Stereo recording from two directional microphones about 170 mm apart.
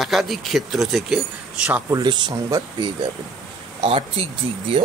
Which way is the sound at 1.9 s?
25° right (ahead or behind).